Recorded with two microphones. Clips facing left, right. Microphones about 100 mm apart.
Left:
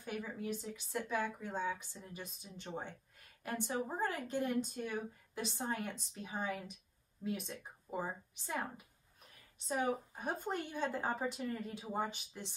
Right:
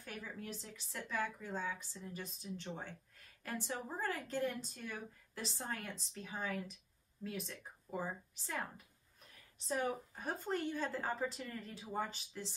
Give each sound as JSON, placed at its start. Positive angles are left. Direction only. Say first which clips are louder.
{"t": 0.0, "sound": "a woman's voice", "louder": "left 6 dB", "side_deg": 15}